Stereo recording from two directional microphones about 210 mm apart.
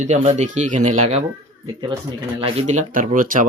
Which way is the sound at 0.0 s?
35° right (ahead or behind).